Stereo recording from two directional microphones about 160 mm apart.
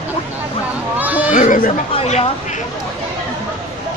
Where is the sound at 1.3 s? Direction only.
55° left (ahead or behind).